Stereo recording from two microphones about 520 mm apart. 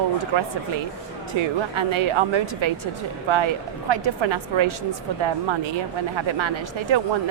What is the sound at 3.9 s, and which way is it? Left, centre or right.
Speech, right.